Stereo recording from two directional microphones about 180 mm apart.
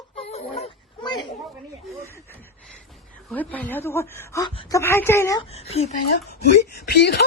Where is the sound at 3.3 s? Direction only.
10° left (ahead or behind).